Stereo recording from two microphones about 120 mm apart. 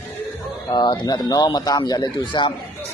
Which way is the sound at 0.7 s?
40° left (ahead or behind).